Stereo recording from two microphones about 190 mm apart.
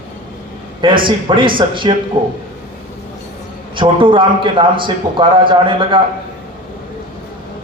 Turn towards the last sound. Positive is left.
turn(degrees=-25)  # may be behind; listen again after turning